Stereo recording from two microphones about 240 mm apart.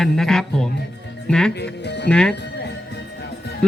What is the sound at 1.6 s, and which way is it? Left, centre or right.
Speech, left.